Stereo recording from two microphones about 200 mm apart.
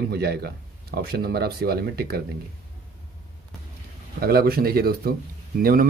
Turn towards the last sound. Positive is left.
turn(degrees=-45)  # may be behind; listen again after turning